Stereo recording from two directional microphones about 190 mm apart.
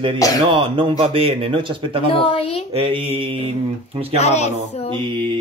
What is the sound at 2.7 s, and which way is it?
Speech, 30° right (ahead or behind).